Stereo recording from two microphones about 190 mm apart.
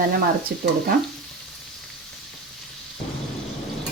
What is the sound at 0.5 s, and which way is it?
Speech, 55° right (ahead or behind).